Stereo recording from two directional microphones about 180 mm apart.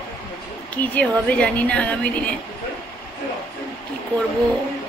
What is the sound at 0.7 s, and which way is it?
A woman's voice, 10° left (ahead or behind).